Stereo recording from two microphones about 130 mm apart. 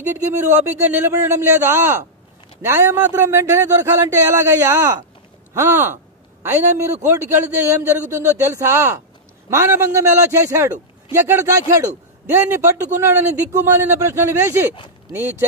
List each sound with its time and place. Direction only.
0.0 s speech: 15° right (ahead or behind)